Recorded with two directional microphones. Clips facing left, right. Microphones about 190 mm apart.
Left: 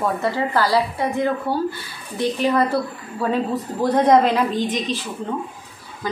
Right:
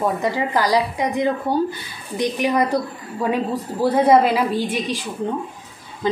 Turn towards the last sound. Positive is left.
turn(degrees=-25)  # may be behind; listen again after turning